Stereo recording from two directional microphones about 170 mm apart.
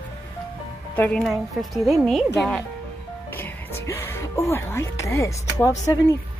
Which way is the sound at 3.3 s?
15° left (ahead or behind).